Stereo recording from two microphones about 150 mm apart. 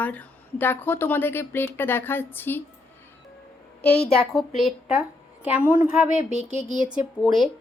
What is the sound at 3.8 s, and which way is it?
Speech, 40° left (ahead or behind).